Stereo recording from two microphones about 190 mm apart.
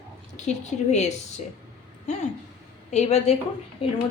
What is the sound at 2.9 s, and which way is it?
A woman's voice, 35° left (ahead or behind).